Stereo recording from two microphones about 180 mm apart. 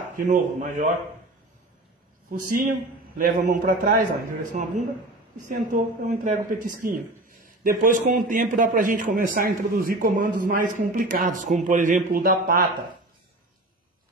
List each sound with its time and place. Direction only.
0.1 s a man's voice: 45° right (ahead or behind)
2.3 s a man's voice: 50° right (ahead or behind)